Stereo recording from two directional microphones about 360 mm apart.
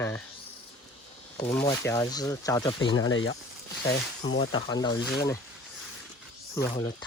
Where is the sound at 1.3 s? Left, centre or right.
Centre.